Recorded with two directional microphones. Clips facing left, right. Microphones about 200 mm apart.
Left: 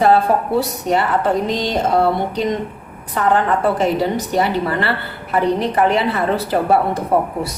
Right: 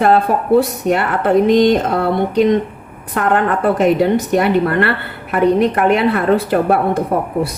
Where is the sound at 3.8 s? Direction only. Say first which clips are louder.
Right 5 dB; 60° right (ahead or behind).